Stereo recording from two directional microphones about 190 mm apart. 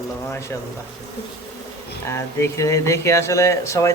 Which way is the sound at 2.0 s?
15° left (ahead or behind).